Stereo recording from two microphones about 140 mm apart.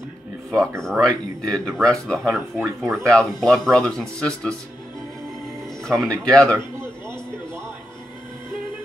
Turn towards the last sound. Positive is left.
turn(degrees=-20)  # may be behind; listen again after turning